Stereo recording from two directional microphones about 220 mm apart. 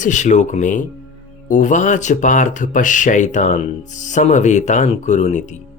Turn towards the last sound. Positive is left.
turn(degrees=35)  # may be behind; listen again after turning